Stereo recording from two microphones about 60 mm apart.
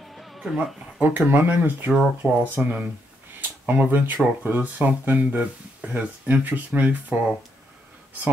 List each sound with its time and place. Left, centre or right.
0.1 s music: centre
0.4 s speech: centre
1.0 s speech: right
1.9 s speech: centre
2.5 s speech: right